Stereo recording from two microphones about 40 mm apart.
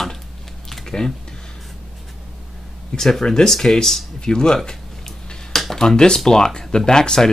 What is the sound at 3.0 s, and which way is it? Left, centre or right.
Speech, centre.